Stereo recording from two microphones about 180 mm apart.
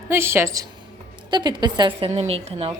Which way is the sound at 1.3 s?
25° right (ahead or behind).